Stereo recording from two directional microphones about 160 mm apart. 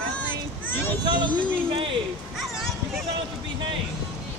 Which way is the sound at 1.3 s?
10° left (ahead or behind).